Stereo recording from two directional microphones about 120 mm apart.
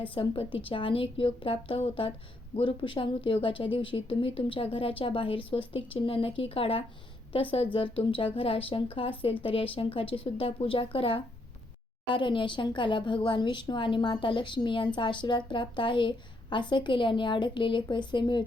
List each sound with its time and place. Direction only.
0.0 s a woman's voice: 50° left (ahead or behind)